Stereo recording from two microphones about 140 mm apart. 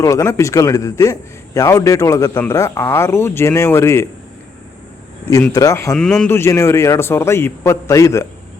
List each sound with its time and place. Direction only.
0.0 s a man's voice: 20° left (ahead or behind)
5.5 s a man's voice: 20° left (ahead or behind)
5.9 s a man's voice: 5° left (ahead or behind)
6.2 s a man's voice: 20° left (ahead or behind)